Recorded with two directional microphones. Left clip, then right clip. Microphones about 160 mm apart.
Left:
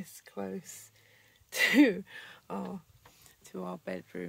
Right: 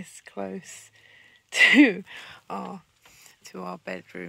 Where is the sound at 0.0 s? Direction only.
35° right (ahead or behind).